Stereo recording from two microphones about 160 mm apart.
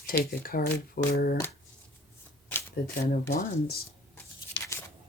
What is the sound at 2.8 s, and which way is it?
Speech, 70° left (ahead or behind).